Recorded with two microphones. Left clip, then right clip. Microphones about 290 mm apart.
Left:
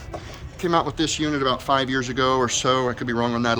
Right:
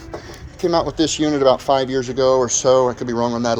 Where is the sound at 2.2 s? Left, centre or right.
Centre.